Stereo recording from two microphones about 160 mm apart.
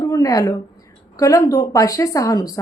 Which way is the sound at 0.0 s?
20° left (ahead or behind).